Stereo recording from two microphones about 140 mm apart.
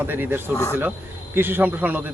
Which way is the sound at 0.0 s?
15° right (ahead or behind).